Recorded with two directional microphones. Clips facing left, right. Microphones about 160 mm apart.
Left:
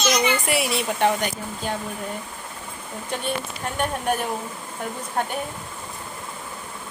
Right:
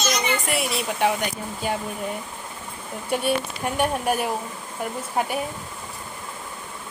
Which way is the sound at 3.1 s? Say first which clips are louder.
Right 5 dB; 10° right (ahead or behind).